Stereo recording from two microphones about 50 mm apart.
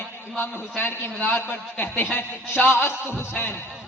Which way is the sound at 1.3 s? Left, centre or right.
Left.